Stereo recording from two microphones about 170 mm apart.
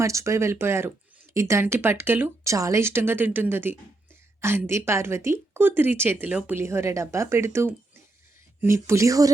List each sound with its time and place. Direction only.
0.0 s speech: 15° right (ahead or behind)